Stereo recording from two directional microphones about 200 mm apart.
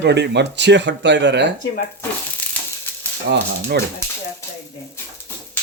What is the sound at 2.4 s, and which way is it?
Frying, 5° left (ahead or behind).